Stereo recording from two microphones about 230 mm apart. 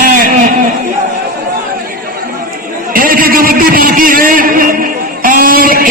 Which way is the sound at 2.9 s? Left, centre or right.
Right.